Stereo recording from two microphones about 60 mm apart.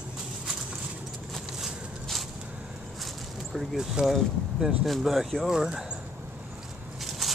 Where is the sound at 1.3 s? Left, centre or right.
Centre.